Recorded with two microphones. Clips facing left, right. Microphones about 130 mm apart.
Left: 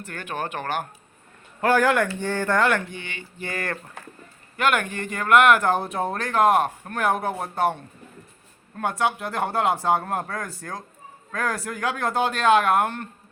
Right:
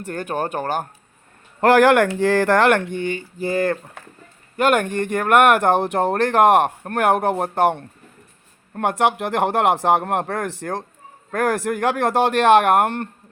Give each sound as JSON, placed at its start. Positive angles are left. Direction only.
{"t": 0.0, "sound": "speech", "side_deg": -40}
{"t": 1.6, "sound": "speech", "side_deg": -70}
{"t": 2.1, "sound": "speech", "side_deg": -90}
{"t": 4.5, "sound": "speech", "side_deg": -40}